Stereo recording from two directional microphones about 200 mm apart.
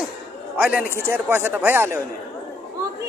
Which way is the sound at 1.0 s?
10° right (ahead or behind).